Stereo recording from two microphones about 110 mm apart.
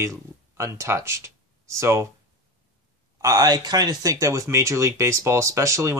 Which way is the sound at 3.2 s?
35° right (ahead or behind).